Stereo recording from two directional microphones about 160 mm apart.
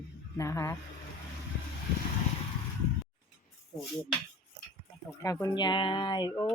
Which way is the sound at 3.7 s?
25° left (ahead or behind).